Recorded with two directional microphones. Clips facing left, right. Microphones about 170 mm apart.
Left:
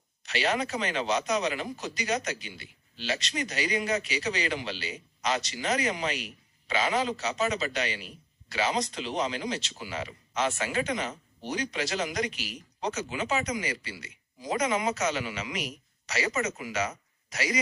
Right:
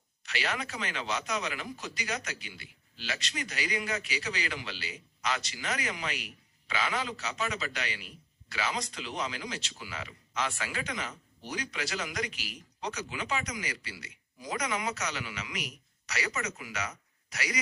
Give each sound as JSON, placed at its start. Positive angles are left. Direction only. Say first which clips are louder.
{"t": 0.3, "sound": "speech", "louder": "left 7 dB", "side_deg": 25}
{"t": 7.2, "sound": "a man's voice", "louder": "left 6 dB", "side_deg": 40}
{"t": 7.5, "sound": "speech", "louder": "left 6 dB", "side_deg": 20}